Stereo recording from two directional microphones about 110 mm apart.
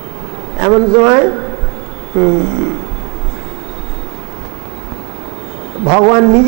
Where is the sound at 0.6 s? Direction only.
25° right (ahead or behind).